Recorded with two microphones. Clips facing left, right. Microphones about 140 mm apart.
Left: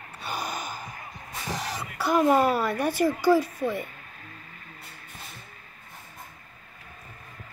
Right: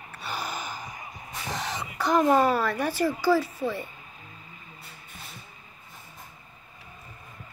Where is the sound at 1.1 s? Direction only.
Centre (ahead or behind).